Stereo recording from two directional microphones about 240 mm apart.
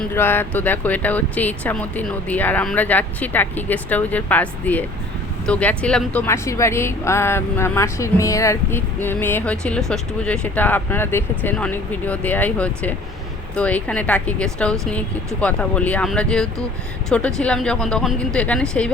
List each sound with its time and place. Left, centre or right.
0.0 s speech: centre